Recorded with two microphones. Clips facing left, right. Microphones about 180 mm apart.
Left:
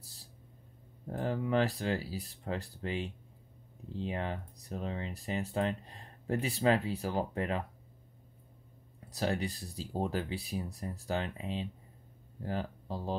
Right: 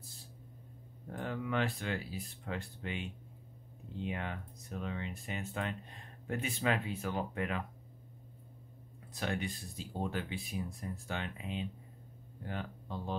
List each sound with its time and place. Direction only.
0.0 s a sound: 35° left (ahead or behind)
1.1 s speech: 35° left (ahead or behind)
9.1 s speech: 35° left (ahead or behind)